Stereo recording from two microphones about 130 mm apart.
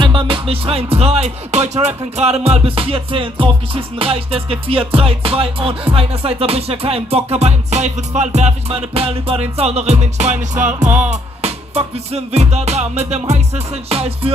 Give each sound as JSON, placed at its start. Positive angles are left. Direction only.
{"t": 0.0, "sound": "music", "side_deg": -40}